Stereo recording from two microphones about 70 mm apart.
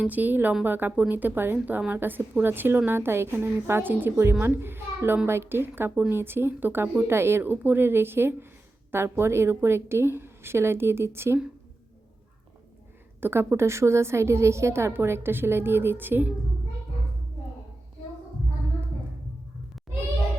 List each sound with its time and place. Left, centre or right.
0.0 s a woman's voice: right
13.1 s a woman's voice: right